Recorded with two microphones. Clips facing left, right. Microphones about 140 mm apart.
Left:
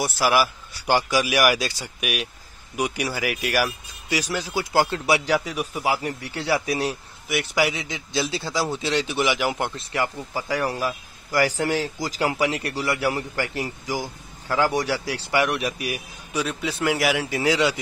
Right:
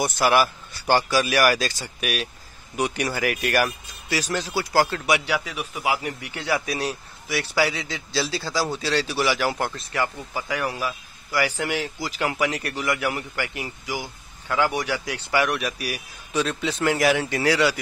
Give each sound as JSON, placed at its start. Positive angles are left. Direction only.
{"t": 0.0, "sound": "a man's voice", "side_deg": 5}
{"t": 16.3, "sound": "speech", "side_deg": 10}